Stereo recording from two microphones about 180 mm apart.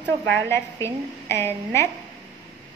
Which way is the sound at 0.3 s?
15° left (ahead or behind).